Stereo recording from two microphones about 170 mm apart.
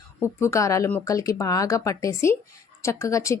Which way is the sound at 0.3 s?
15° left (ahead or behind).